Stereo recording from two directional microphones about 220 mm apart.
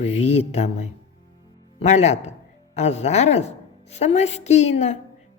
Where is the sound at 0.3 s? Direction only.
30° left (ahead or behind).